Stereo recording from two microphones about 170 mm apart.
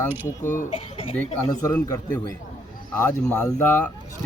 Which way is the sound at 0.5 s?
35° left (ahead or behind).